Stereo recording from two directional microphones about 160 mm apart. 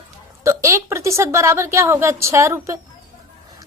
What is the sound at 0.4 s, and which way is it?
A woman's voice, 20° right (ahead or behind).